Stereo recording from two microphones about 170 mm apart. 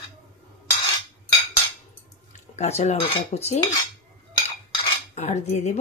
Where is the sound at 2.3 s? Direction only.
40° left (ahead or behind).